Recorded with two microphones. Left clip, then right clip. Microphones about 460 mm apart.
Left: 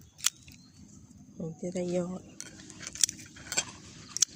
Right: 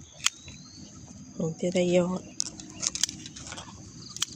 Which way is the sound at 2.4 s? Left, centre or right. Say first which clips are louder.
Right 10 dB; right.